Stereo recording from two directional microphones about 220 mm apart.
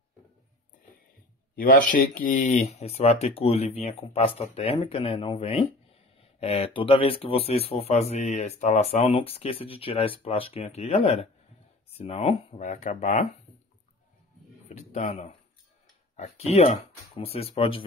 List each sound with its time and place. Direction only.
1.5 s speech: 40° left (ahead or behind)
14.7 s speech: 30° left (ahead or behind)